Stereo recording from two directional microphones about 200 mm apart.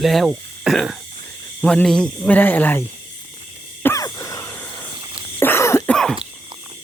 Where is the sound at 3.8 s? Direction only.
15° left (ahead or behind).